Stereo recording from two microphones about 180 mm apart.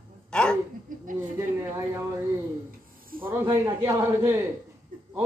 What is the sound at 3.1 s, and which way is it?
Snake, 55° right (ahead or behind).